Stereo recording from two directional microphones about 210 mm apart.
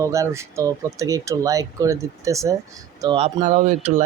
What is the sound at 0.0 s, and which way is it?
Speech, 15° right (ahead or behind).